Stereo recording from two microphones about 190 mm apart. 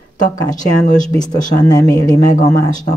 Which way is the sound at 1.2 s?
20° left (ahead or behind).